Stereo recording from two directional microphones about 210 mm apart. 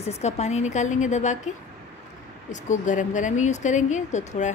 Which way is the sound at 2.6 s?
35° left (ahead or behind).